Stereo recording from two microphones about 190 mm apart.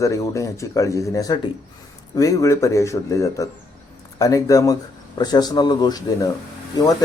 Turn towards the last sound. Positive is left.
turn(degrees=20)  # may be behind; listen again after turning